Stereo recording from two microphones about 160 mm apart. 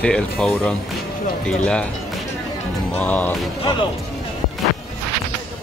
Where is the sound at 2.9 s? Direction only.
10° left (ahead or behind).